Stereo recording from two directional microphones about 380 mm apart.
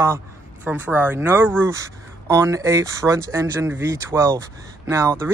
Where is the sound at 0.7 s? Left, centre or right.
Centre.